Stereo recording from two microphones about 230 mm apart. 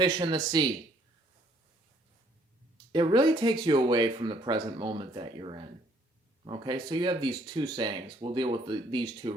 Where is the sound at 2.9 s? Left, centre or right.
Centre.